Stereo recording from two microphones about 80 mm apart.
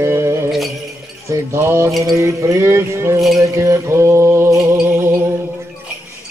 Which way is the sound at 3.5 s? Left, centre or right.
Right.